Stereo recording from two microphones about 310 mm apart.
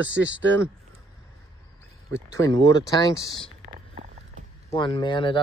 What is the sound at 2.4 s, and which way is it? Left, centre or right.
Speech, centre.